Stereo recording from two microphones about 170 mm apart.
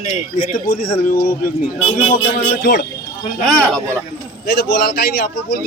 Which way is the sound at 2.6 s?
75° left (ahead or behind).